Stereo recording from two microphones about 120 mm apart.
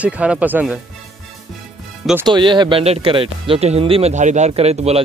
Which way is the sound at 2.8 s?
55° right (ahead or behind).